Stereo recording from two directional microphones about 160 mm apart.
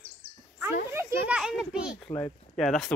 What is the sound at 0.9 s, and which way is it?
Children playing, 15° right (ahead or behind).